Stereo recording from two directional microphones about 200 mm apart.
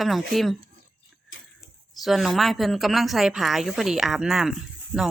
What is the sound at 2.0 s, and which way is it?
Speech, centre (ahead or behind).